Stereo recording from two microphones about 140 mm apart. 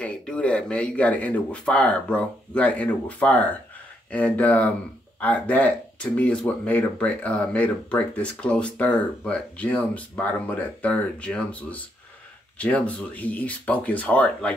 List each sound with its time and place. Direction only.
0.0 s speech: 10° left (ahead or behind)